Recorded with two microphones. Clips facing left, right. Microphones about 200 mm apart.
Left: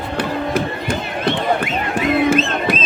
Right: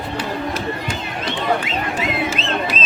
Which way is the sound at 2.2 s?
55° left (ahead or behind).